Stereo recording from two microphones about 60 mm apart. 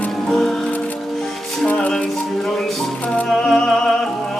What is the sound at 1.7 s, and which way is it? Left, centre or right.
Music, centre.